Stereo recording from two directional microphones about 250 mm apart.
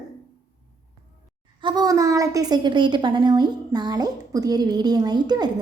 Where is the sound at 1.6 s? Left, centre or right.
Centre.